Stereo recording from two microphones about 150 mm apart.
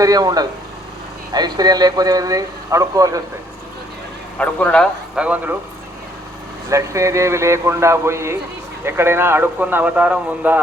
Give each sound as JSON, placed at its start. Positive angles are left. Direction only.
{"t": 0.0, "sound": "speech", "side_deg": -25}
{"t": 4.4, "sound": "speech", "side_deg": 10}
{"t": 5.1, "sound": "speech", "side_deg": -10}
{"t": 6.7, "sound": "speech", "side_deg": -20}